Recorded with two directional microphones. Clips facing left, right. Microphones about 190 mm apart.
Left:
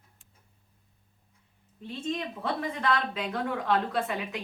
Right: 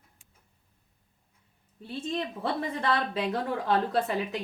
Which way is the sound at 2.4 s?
35° right (ahead or behind).